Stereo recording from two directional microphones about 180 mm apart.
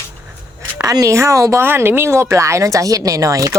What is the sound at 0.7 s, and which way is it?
Speech, 20° right (ahead or behind).